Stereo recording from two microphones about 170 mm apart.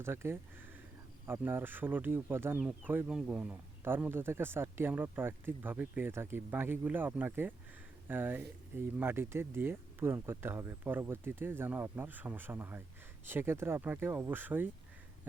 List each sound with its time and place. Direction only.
0.0 s speech: 15° right (ahead or behind)